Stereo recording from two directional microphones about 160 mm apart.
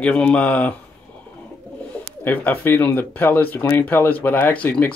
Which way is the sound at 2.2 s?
10° left (ahead or behind).